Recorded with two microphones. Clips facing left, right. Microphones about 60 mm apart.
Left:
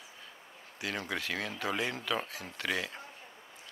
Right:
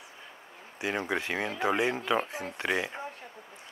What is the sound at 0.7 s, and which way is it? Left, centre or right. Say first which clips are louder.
Speech: right 6 dB; right.